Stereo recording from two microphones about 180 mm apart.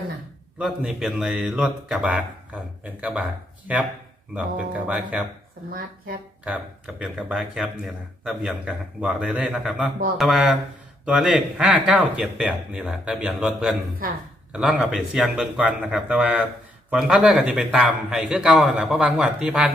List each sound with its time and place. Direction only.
0.6 s speech: 5° right (ahead or behind)
6.4 s speech: 5° right (ahead or behind)